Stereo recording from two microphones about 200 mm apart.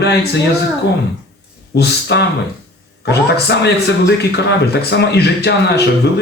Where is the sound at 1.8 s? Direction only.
55° left (ahead or behind).